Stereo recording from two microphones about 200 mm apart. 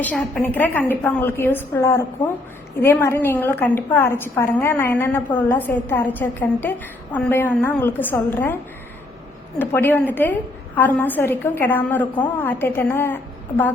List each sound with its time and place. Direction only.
0.0 s a woman's voice: 5° left (ahead or behind)
9.6 s a woman's voice: 10° left (ahead or behind)